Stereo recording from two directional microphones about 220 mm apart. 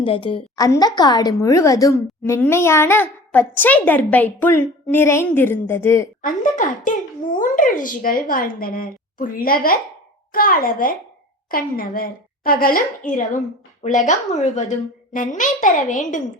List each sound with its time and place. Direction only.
0.0 s a woman's voice: 25° left (ahead or behind)
6.2 s speech: 35° left (ahead or behind)